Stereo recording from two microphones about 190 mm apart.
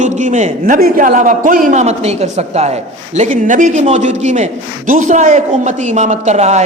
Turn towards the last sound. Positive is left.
turn(degrees=-35)  # may be behind; listen again after turning